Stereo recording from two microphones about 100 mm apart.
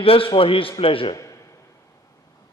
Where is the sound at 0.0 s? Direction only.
65° left (ahead or behind).